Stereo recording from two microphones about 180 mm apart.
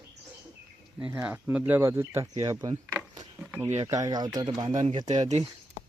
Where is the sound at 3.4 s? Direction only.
10° right (ahead or behind).